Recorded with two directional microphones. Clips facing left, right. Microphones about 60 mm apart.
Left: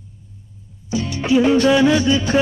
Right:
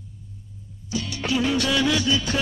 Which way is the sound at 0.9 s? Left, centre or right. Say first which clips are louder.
Left 8 dB; left.